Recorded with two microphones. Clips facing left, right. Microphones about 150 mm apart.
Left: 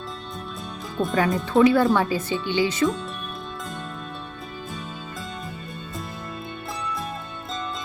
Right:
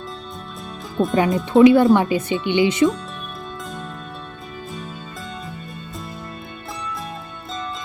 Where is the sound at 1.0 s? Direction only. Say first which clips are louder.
Right 4 dB; 10° right (ahead or behind).